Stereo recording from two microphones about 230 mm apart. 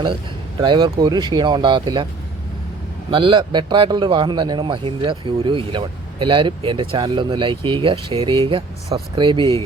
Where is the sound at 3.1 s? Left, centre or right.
Right.